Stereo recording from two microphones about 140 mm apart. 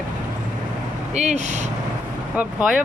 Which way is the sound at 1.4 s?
60° right (ahead or behind).